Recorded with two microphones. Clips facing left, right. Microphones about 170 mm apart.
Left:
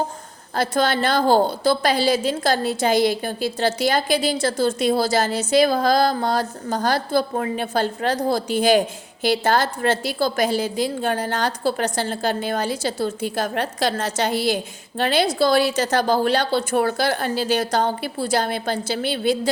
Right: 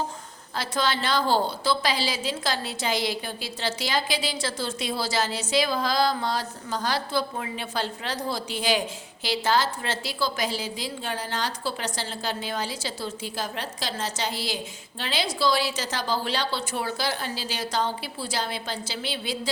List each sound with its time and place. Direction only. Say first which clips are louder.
0.5 s a woman's voice: left 7 dB; 55° left (ahead or behind)